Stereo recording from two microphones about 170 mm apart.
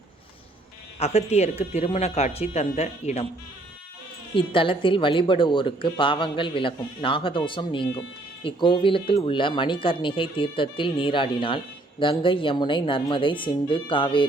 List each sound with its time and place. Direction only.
0.9 s a woman's voice: 40° left (ahead or behind)
4.4 s a woman's voice: 30° left (ahead or behind)